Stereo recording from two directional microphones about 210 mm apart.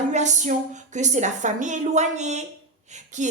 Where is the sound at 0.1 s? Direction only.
35° right (ahead or behind).